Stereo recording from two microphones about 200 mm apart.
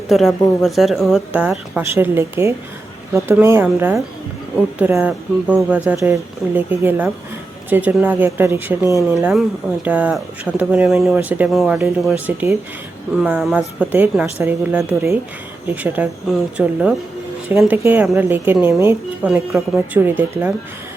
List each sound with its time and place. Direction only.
0.1 s a woman's voice: centre (ahead or behind)